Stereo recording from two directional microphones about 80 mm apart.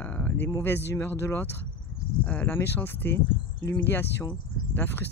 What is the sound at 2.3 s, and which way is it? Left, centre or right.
Speech, left.